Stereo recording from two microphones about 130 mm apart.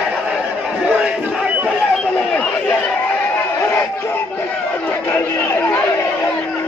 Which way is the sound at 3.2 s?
15° left (ahead or behind).